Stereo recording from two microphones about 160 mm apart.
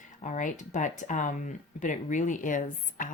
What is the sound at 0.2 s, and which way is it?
A woman's voice, 50° left (ahead or behind).